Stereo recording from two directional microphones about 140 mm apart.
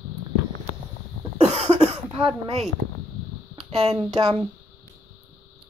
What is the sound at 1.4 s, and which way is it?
Cough, 50° right (ahead or behind).